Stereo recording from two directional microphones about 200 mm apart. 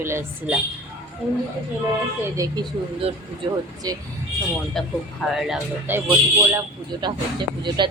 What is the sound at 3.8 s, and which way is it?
Speech, 20° right (ahead or behind).